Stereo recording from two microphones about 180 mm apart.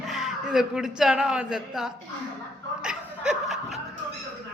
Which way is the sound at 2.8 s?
5° right (ahead or behind).